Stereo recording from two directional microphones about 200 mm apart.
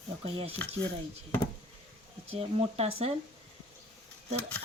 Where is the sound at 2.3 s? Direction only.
30° right (ahead or behind).